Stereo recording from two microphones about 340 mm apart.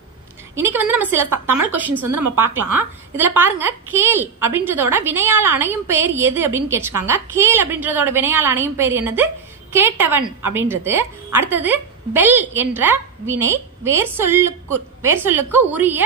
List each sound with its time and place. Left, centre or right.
0.6 s a woman's voice: centre
2.0 s a woman's voice: right
2.7 s a woman's voice: centre